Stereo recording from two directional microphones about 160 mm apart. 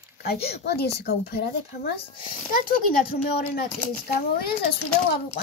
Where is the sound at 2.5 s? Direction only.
70° left (ahead or behind).